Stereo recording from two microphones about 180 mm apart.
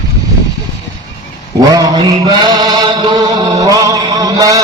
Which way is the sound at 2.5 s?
20° right (ahead or behind).